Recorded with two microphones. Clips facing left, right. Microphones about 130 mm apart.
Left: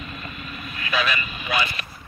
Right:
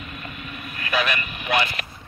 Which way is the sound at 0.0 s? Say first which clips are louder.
Even; 60° right (ahead or behind).